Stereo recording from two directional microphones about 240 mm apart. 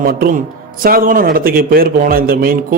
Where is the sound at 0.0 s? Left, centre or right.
Right.